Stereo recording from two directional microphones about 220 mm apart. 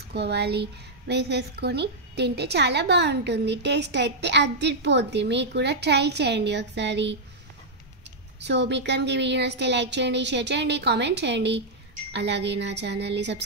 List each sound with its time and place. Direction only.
0.1 s a woman's voice: 50° right (ahead or behind)
8.4 s a woman's voice: 50° right (ahead or behind)